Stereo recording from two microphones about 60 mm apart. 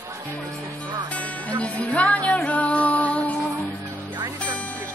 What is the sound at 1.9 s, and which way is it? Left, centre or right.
Music, left.